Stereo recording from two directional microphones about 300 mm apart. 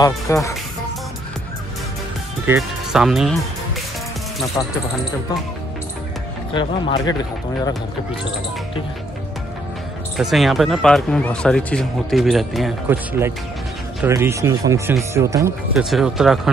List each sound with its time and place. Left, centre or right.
0.0 s speech: centre
2.4 s speech: centre
4.6 s speech: centre
6.5 s speech: centre
10.1 s speech: centre